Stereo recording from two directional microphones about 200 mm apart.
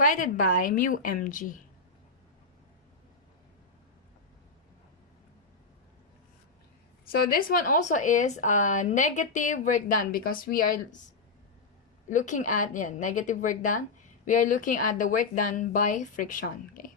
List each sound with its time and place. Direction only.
0.0 s a woman's voice: 40° left (ahead or behind)
7.3 s a woman's voice: 45° left (ahead or behind)
12.0 s a woman's voice: 40° left (ahead or behind)